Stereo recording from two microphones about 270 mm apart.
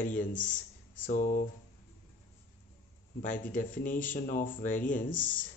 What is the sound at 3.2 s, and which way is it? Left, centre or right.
Speech, left.